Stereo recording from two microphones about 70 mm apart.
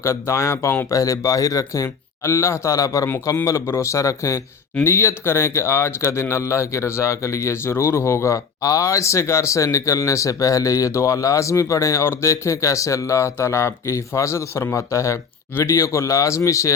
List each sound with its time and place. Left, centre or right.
0.0 s speech: left
4.8 s speech: left